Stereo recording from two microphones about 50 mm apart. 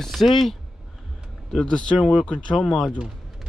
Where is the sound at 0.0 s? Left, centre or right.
Centre.